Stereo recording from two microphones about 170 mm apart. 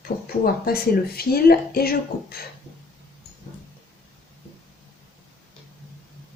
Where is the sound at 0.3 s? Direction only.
65° left (ahead or behind).